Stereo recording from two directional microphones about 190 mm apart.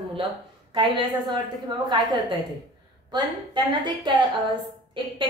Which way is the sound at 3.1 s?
25° right (ahead or behind).